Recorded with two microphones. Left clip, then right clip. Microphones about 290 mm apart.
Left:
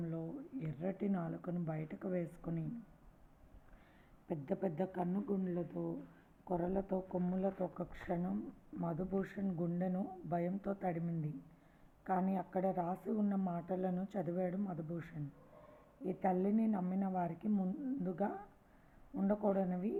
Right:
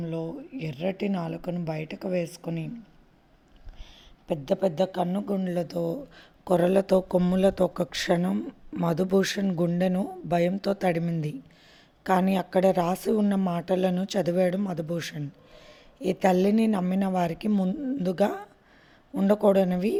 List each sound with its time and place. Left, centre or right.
0.0 s speech: right
4.3 s a woman's voice: right
16.0 s speech: right